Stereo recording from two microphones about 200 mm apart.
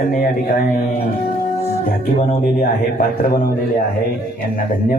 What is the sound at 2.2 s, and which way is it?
A man's voice, 35° left (ahead or behind).